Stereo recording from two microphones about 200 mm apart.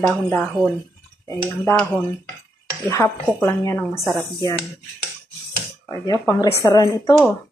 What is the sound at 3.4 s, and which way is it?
Speech, 15° left (ahead or behind).